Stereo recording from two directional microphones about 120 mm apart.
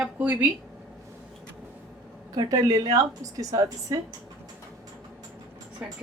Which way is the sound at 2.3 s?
30° right (ahead or behind).